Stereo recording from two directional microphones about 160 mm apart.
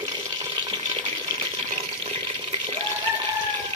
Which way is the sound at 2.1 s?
40° right (ahead or behind).